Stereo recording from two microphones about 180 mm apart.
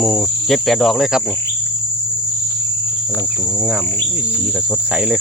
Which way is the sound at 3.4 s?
5° right (ahead or behind).